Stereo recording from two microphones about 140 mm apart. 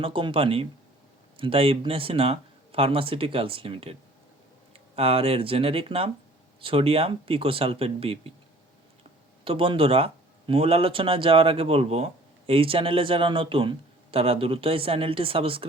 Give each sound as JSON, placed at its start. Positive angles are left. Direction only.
{"t": 0.0, "sound": "speech", "side_deg": -35}
{"t": 9.4, "sound": "speech", "side_deg": -40}